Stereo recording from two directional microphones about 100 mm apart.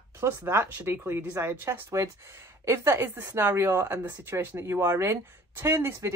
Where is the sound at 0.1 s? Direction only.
25° right (ahead or behind).